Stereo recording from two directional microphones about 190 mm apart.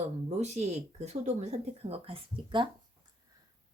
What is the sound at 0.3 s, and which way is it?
Speech, 35° right (ahead or behind).